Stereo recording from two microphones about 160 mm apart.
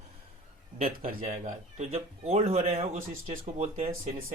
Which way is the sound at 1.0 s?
50° right (ahead or behind).